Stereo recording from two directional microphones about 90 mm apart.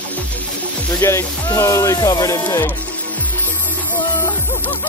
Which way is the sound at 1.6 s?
35° left (ahead or behind).